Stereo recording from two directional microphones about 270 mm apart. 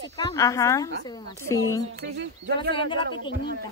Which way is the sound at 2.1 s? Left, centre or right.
Right.